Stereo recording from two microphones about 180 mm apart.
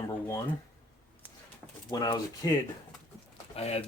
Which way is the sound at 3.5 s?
35° left (ahead or behind).